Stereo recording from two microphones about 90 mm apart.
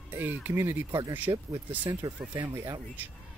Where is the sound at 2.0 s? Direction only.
55° right (ahead or behind).